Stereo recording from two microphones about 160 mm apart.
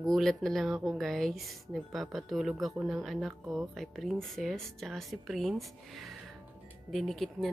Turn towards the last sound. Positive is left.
turn(degrees=0)  # may be behind; listen again after turning